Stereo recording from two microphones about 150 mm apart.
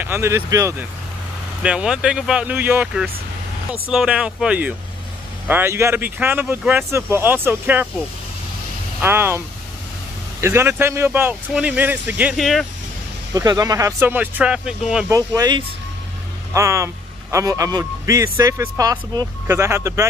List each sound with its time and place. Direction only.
0.0 s speech: 15° right (ahead or behind)
1.6 s speech: 5° right (ahead or behind)
9.0 s speech: 15° right (ahead or behind)
10.4 s speech: 15° right (ahead or behind)
12.4 s speech: centre (ahead or behind)
13.3 s speech: 25° right (ahead or behind); by 15.0 s 5° right (ahead or behind)
15.0 s speech: 25° right (ahead or behind)